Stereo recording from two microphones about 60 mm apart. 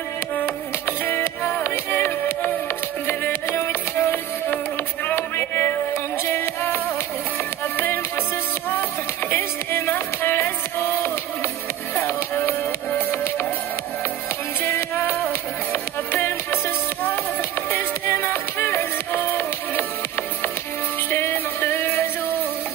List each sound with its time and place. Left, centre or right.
0.4 s music: left
9.3 s music: left
14.6 s music: left
17.6 s music: left
21.1 s music: left